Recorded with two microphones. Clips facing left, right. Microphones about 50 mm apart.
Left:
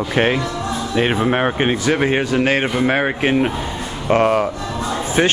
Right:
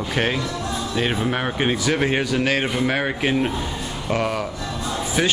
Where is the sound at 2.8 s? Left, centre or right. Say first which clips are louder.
Left 4 dB; left.